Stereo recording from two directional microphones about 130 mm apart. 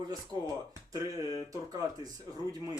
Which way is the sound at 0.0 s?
30° right (ahead or behind).